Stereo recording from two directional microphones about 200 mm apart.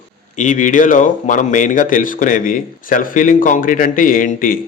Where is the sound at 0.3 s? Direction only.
40° left (ahead or behind).